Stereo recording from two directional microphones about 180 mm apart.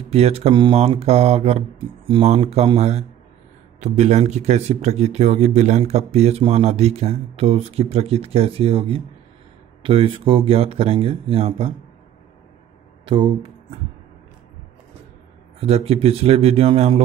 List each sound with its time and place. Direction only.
0.1 s speech: 35° right (ahead or behind)
13.0 s speech: 30° right (ahead or behind)
15.6 s speech: 35° right (ahead or behind)